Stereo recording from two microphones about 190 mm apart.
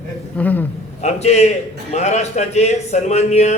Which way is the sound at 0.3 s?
10° left (ahead or behind).